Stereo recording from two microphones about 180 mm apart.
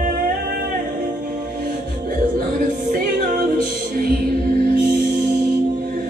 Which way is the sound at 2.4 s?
50° right (ahead or behind).